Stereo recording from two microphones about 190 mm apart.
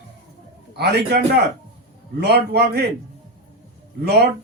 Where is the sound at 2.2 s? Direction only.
60° right (ahead or behind).